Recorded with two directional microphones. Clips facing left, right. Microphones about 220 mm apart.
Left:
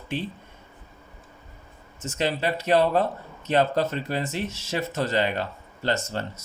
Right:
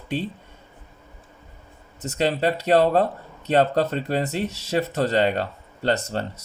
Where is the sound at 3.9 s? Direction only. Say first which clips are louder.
Right 4 dB; 35° right (ahead or behind).